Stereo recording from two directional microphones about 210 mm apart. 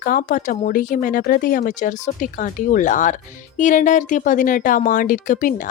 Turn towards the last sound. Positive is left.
turn(degrees=40)  # may be behind; listen again after turning